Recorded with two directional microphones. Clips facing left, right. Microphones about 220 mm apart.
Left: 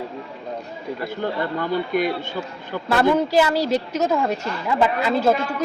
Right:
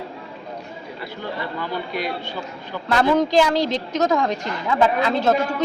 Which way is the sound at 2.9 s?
5° left (ahead or behind).